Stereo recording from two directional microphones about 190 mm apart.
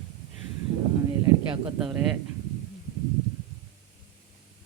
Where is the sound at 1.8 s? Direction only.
5° right (ahead or behind).